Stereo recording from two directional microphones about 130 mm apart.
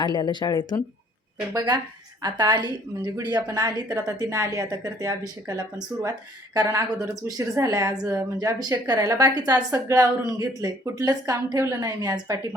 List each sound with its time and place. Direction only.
0.0 s speech: 35° left (ahead or behind)
1.5 s a woman's voice: 35° right (ahead or behind)